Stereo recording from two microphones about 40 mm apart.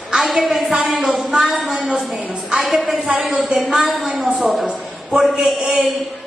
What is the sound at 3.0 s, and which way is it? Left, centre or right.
Speech, right.